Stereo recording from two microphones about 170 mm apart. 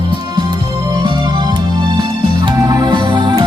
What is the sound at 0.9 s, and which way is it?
Music, 25° right (ahead or behind).